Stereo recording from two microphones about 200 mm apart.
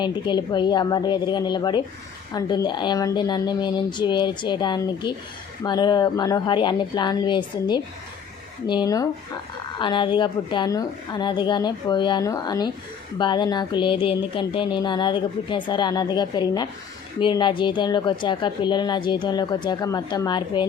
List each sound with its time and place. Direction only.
0.0 s speech: 20° left (ahead or behind)